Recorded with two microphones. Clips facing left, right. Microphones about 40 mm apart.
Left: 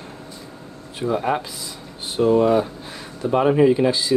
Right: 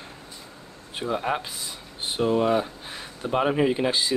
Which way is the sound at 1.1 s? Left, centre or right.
Centre.